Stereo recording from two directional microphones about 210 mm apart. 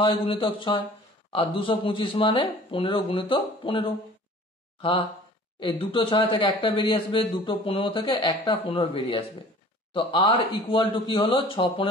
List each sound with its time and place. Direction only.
0.0 s a man's voice: 25° left (ahead or behind)
5.6 s a man's voice: 25° left (ahead or behind)